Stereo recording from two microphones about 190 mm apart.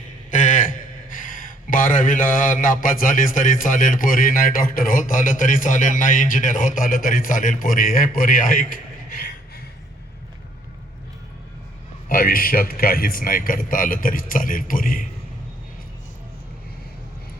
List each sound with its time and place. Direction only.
0.3 s a man's voice: 40° left (ahead or behind)
12.0 s speech: 50° left (ahead or behind)